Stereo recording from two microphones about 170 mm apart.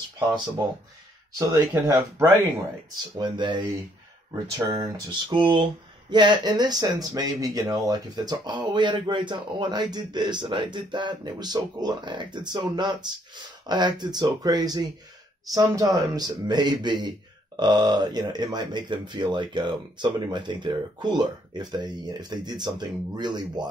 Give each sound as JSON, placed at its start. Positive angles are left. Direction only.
{"t": 1.5, "sound": "speech", "side_deg": -15}
{"t": 3.2, "sound": "speech", "side_deg": -25}